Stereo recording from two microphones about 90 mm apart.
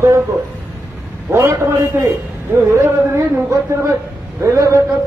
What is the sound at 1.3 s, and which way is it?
A man's voice, 30° right (ahead or behind).